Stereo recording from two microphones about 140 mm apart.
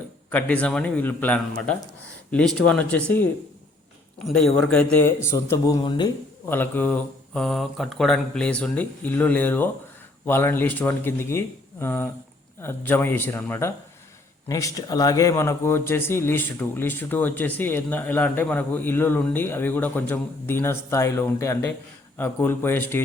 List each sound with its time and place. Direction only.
0.3 s speech: 10° left (ahead or behind)
4.4 s speech: 5° left (ahead or behind); by 6.1 s 30° left (ahead or behind)
6.4 s speech: 15° left (ahead or behind)